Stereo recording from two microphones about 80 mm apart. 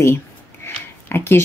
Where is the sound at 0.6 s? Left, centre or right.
Left.